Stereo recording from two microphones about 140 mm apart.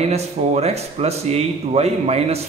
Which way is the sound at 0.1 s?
50° right (ahead or behind).